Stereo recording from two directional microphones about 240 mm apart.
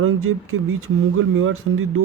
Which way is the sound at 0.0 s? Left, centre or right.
Right.